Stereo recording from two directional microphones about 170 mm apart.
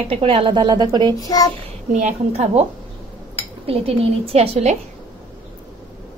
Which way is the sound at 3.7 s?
35° right (ahead or behind).